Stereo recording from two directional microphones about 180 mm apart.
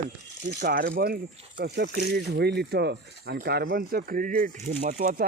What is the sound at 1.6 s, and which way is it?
Speech, 65° right (ahead or behind).